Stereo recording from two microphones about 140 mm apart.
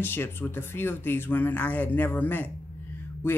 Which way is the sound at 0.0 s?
15° left (ahead or behind).